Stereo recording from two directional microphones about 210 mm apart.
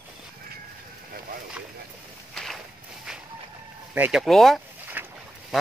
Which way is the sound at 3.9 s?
5° right (ahead or behind).